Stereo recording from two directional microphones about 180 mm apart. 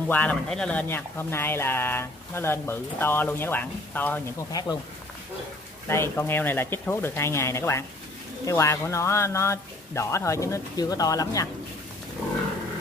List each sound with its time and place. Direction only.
0.1 s speech: 10° left (ahead or behind)
5.9 s speech: 15° left (ahead or behind)